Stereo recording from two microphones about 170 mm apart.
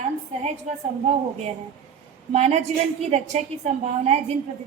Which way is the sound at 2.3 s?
40° right (ahead or behind).